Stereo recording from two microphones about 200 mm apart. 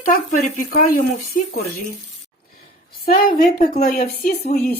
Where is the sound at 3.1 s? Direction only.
45° left (ahead or behind).